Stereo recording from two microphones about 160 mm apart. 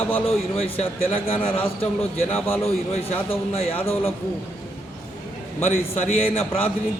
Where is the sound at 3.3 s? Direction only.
40° left (ahead or behind).